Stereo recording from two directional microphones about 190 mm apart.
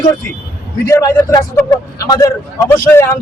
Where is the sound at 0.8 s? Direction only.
15° left (ahead or behind).